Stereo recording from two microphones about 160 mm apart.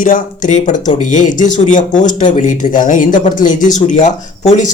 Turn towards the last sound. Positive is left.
turn(degrees=50)  # may be behind; listen again after turning